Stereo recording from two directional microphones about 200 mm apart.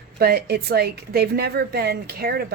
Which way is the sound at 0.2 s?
50° right (ahead or behind).